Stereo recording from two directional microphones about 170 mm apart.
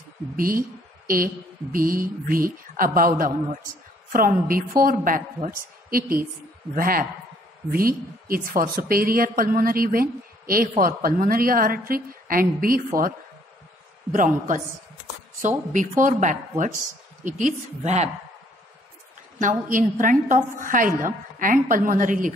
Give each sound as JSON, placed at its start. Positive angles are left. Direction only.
{"t": 0.4, "sound": "speech", "side_deg": -55}
{"t": 14.1, "sound": "a woman's voice", "side_deg": -50}
{"t": 16.0, "sound": "a woman's voice", "side_deg": -50}
{"t": 19.7, "sound": "a woman's voice", "side_deg": -50}